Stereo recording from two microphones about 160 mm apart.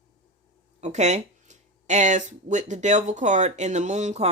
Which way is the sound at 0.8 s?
45° right (ahead or behind).